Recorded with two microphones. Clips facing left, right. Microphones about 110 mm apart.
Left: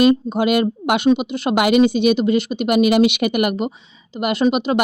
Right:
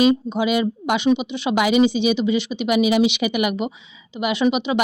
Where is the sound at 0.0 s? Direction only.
55° left (ahead or behind).